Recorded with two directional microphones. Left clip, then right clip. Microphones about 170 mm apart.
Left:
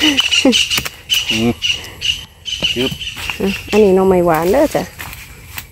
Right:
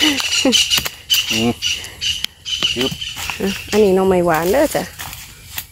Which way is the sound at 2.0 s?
75° right (ahead or behind).